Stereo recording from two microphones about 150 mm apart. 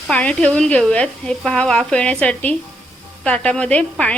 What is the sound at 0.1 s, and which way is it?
Speech, 5° left (ahead or behind).